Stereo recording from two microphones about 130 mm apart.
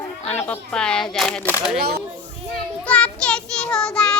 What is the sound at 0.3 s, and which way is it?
Speech, 15° left (ahead or behind).